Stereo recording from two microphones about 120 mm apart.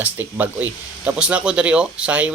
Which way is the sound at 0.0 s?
15° right (ahead or behind).